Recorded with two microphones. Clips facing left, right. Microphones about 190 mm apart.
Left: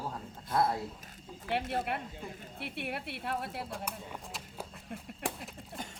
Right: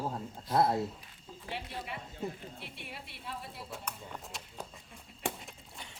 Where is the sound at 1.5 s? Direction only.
55° left (ahead or behind).